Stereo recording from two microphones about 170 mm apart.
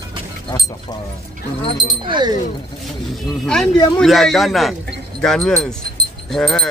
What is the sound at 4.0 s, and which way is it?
Speech, centre (ahead or behind).